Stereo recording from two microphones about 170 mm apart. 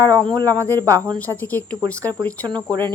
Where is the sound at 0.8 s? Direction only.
20° right (ahead or behind).